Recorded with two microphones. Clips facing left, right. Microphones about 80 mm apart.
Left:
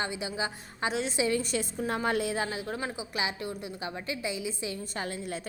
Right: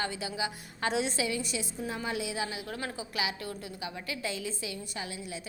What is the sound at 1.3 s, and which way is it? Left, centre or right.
A woman's voice, left.